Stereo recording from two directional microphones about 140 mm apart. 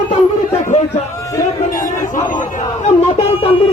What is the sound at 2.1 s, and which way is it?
Speech, 65° left (ahead or behind).